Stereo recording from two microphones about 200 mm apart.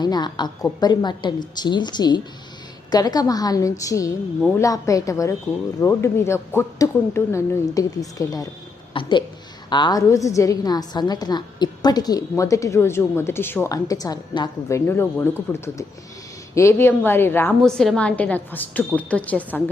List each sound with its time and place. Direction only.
0.0 s a woman's voice: 20° left (ahead or behind)